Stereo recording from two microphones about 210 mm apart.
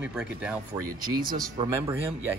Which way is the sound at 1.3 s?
15° right (ahead or behind).